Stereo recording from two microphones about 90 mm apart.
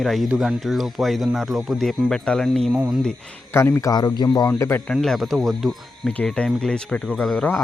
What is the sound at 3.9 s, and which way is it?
Speech, 50° left (ahead or behind).